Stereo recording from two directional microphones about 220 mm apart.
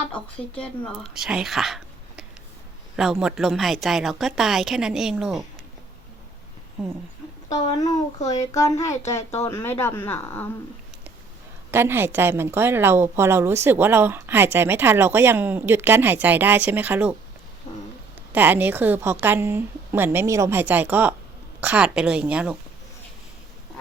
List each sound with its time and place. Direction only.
0.1 s a woman's voice: 5° left (ahead or behind)
8.2 s speech: 15° left (ahead or behind)
11.7 s a woman's voice: 10° right (ahead or behind)
18.3 s a woman's voice: 10° right (ahead or behind)